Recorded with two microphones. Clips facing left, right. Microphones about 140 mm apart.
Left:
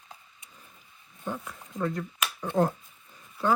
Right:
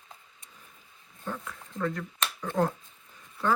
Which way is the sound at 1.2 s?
20° left (ahead or behind).